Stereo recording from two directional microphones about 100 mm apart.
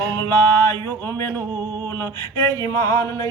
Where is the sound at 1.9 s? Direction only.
25° left (ahead or behind).